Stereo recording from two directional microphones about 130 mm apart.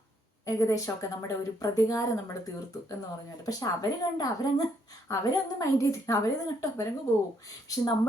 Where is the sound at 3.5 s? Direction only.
30° left (ahead or behind).